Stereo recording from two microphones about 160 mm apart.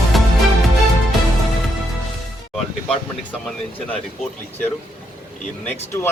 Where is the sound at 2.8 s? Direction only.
5° left (ahead or behind).